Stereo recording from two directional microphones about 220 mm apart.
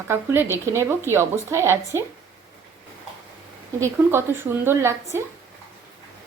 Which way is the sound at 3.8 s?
10° right (ahead or behind).